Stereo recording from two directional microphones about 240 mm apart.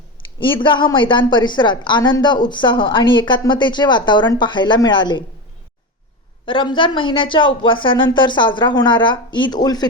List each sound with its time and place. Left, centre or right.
0.3 s a woman's voice: left
6.4 s a woman's voice: left